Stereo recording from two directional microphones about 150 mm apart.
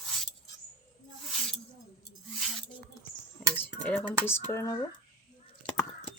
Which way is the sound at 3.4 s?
5° left (ahead or behind).